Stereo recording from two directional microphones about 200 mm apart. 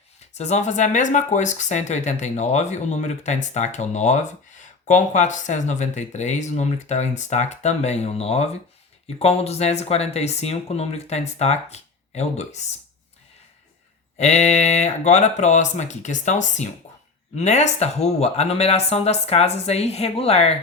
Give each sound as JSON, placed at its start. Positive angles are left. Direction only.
{"t": 0.3, "sound": "speech", "side_deg": 35}
{"t": 14.2, "sound": "speech", "side_deg": 35}